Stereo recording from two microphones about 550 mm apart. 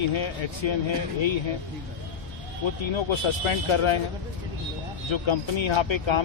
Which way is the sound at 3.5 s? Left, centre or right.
Left.